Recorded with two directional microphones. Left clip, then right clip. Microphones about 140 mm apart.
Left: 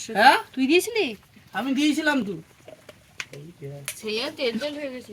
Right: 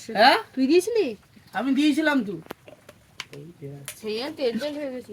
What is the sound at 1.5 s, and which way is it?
Speech, 55° left (ahead or behind).